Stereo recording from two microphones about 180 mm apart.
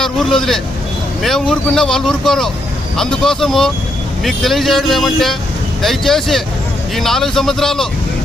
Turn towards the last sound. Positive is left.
turn(degrees=0)  # may be behind; listen again after turning